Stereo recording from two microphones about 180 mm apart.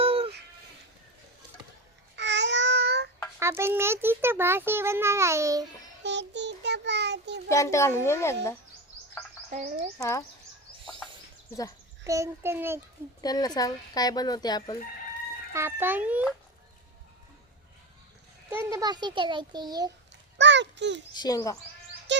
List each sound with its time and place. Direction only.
0.0 s music: 30° right (ahead or behind)
2.1 s babbling: 80° right
3.4 s a child's voice: 15° right (ahead or behind)
6.0 s child singing: 75° right (ahead or behind)
7.4 s a child's voice: 15° left (ahead or behind)
9.5 s speech: 40° right (ahead or behind)
10.0 s a child's voice: 15° left (ahead or behind)
12.0 s a child's voice: 15° right (ahead or behind)
13.2 s speech: 20° left (ahead or behind)
15.5 s a child's voice: 15° right (ahead or behind)
18.5 s a child's voice: 20° right (ahead or behind)
20.4 s a child's voice: 80° right
21.1 s speech: 20° left (ahead or behind)
22.1 s music: 80° right